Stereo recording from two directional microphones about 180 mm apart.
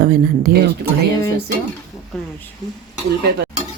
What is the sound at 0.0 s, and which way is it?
Speech, 55° right (ahead or behind).